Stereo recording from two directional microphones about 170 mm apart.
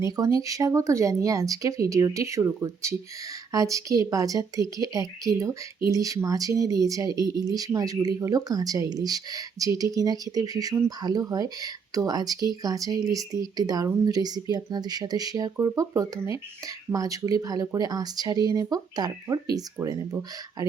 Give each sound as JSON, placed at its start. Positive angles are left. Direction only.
{"t": 0.0, "sound": "speech", "side_deg": -20}